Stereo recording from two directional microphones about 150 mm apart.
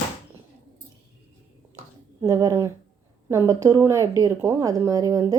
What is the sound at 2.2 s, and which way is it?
Speech, 20° right (ahead or behind).